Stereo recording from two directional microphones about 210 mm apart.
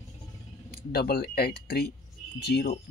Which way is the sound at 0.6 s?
50° left (ahead or behind).